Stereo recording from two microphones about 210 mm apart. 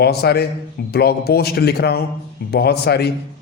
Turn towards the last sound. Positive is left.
turn(degrees=50)  # may be behind; listen again after turning